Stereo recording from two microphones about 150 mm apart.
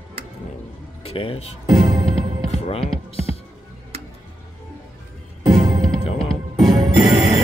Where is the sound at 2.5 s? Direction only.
40° left (ahead or behind).